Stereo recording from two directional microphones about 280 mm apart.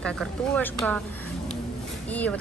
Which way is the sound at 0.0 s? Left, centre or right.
Centre.